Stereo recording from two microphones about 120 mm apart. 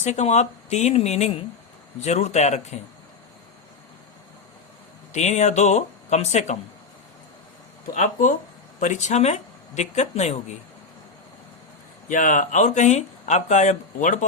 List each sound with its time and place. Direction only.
0.0 s speech: 75° left (ahead or behind)
5.1 s speech: 75° left (ahead or behind)
7.9 s speech: 90° left; by 10.3 s 70° left (ahead or behind)
12.0 s speech: 90° left